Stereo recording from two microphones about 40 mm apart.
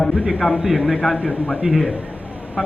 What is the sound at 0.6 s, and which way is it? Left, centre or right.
Speech, right.